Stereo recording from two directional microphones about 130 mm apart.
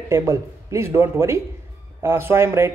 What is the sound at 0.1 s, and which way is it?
Speech, 20° right (ahead or behind).